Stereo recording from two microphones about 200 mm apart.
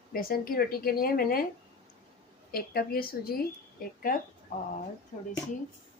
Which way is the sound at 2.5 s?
50° left (ahead or behind).